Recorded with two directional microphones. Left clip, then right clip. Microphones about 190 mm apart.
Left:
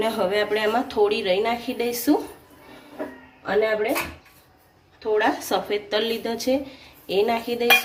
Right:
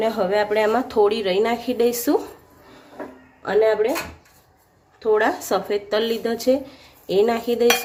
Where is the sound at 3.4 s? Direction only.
50° right (ahead or behind).